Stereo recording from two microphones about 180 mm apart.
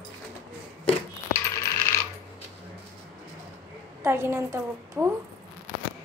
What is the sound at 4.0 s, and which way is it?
A woman's voice, 15° right (ahead or behind).